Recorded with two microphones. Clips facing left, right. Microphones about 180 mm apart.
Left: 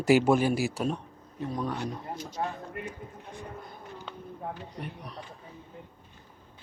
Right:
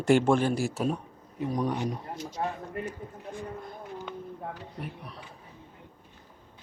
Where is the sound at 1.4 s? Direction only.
15° right (ahead or behind).